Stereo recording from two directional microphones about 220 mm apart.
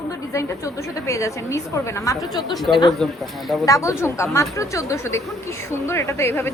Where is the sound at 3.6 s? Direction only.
15° left (ahead or behind).